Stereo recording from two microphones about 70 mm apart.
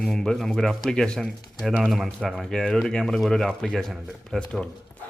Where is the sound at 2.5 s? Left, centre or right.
Centre.